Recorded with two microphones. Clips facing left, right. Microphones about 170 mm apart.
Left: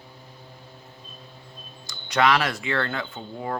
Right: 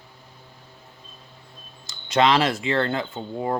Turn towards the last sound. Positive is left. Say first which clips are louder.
# right 5 dB
turn(degrees=-25)  # may be behind; listen again after turning